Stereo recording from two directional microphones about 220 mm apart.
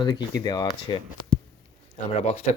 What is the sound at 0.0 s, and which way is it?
Speech, 20° left (ahead or behind).